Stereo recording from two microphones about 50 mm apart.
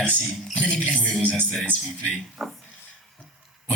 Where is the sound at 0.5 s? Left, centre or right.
Left.